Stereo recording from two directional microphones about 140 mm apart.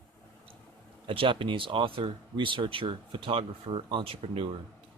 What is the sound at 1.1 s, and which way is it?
Speech, 40° right (ahead or behind).